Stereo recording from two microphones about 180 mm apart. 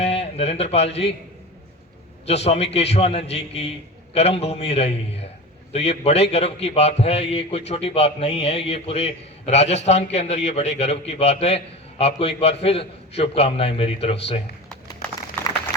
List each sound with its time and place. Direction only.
0.0 s speech: 35° left (ahead or behind)
2.2 s a man's voice: 35° left (ahead or behind)